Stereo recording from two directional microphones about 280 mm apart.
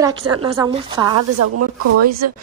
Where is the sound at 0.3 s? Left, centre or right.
Centre.